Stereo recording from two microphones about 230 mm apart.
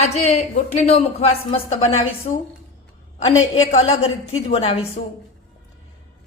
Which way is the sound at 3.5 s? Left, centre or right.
Left.